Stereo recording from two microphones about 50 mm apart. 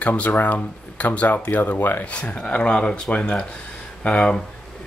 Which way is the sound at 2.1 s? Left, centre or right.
Left.